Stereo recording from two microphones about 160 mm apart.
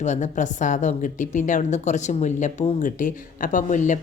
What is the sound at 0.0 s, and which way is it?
A woman's voice, 50° left (ahead or behind).